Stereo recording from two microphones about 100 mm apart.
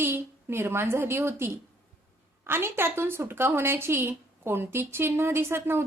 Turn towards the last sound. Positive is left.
turn(degrees=-25)  # may be behind; listen again after turning